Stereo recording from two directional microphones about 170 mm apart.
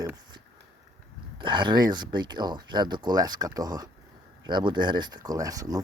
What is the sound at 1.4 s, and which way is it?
Speech, 30° right (ahead or behind).